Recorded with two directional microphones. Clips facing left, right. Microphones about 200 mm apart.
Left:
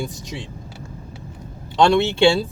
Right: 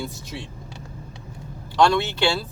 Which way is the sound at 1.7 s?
25° left (ahead or behind).